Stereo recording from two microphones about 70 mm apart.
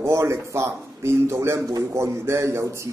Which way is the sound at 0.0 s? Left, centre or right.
Right.